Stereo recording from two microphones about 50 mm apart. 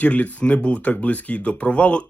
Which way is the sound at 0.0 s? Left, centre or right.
Left.